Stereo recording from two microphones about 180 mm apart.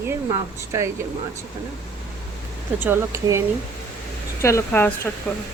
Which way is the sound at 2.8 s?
10° right (ahead or behind).